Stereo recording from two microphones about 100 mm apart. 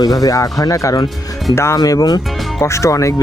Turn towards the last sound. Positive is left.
turn(degrees=30)  # may be behind; listen again after turning